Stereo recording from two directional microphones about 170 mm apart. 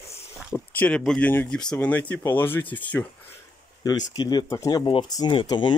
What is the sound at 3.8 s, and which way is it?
Speech, 25° left (ahead or behind).